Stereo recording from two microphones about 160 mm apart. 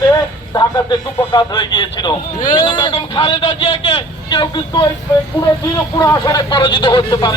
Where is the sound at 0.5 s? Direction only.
30° left (ahead or behind).